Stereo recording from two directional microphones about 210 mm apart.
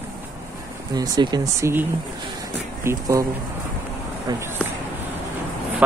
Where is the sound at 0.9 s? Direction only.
20° right (ahead or behind).